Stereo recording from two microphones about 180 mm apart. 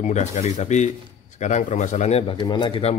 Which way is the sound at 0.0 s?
40° left (ahead or behind).